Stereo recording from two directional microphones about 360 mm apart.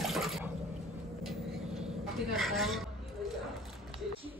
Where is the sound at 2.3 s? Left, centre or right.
Centre.